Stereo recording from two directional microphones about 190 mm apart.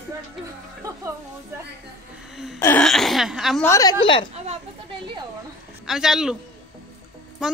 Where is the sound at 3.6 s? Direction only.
15° left (ahead or behind).